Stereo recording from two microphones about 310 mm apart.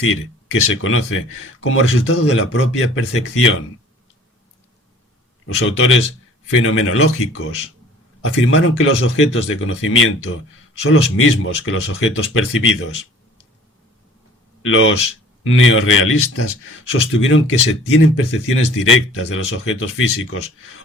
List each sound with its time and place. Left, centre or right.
0.0 s speech: left
5.5 s speech: left
14.6 s a man's voice: left